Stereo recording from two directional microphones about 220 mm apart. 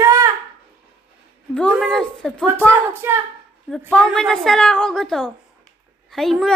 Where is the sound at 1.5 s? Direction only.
5° left (ahead or behind).